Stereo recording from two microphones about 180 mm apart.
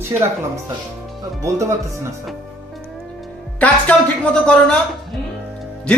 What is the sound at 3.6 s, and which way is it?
Speech, 5° left (ahead or behind).